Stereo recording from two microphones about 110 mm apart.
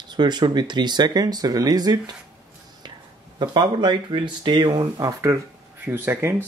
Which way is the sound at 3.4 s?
45° right (ahead or behind).